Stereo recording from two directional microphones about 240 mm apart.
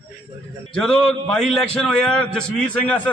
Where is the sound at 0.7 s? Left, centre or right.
Centre.